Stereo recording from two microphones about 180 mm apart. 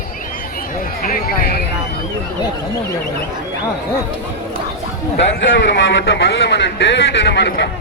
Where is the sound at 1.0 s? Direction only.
55° left (ahead or behind).